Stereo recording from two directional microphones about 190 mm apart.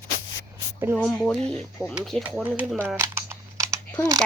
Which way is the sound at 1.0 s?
5° left (ahead or behind).